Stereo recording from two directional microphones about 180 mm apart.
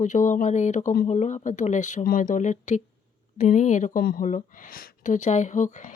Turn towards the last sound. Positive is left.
turn(degrees=45)  # may be behind; listen again after turning